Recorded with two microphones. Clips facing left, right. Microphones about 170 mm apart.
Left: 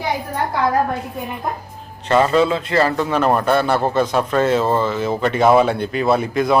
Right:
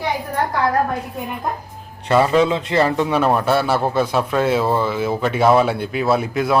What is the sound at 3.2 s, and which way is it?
A man's voice, 5° right (ahead or behind).